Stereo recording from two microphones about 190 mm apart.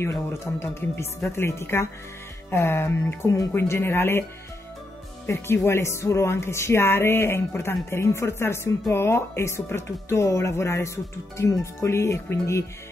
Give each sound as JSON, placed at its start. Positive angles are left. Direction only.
{"t": 0.0, "sound": "speech", "side_deg": 15}
{"t": 5.2, "sound": "speech", "side_deg": 15}